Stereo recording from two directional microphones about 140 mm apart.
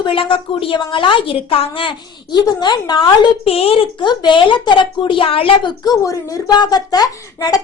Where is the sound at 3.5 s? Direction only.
45° left (ahead or behind).